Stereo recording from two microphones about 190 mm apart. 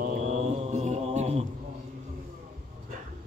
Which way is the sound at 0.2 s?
35° right (ahead or behind).